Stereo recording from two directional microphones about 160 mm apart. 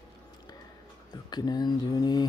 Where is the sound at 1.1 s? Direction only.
25° left (ahead or behind).